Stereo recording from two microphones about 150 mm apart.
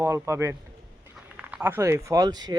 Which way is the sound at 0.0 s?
20° right (ahead or behind).